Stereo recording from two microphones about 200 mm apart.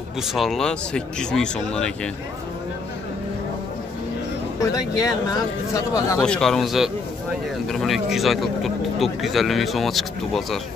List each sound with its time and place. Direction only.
0.3 s speech: centre (ahead or behind)
4.6 s speech: 15° left (ahead or behind)
6.2 s speech: 5° left (ahead or behind)